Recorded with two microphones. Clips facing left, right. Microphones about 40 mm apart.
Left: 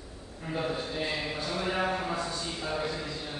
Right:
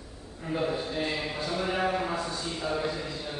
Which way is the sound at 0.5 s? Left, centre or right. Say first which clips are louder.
Right 3 dB; centre.